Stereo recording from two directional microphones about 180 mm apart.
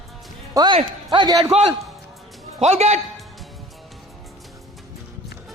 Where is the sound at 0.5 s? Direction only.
25° right (ahead or behind).